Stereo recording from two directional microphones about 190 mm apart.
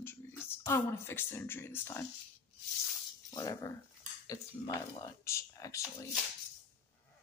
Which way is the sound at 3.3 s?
20° left (ahead or behind).